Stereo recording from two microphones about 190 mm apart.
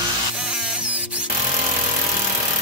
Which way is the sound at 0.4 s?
5° right (ahead or behind).